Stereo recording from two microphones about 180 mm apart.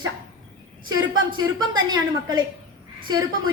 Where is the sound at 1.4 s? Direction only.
20° right (ahead or behind).